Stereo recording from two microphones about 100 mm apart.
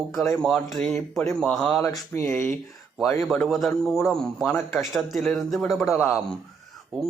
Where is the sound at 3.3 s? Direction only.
Centre (ahead or behind).